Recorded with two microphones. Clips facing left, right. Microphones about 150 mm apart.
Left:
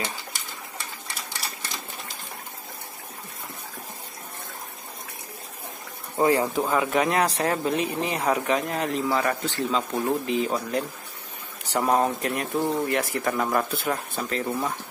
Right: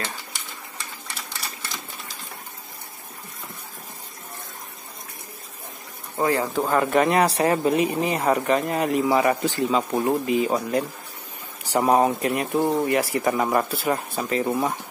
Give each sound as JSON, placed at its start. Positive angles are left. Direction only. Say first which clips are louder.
{"t": 6.1, "sound": "speech", "louder": "left 1 dB", "side_deg": 20}
{"t": 6.6, "sound": "speech", "louder": "right 3 dB", "side_deg": 0}
{"t": 14.4, "sound": "speech", "louder": "right 5 dB", "side_deg": -20}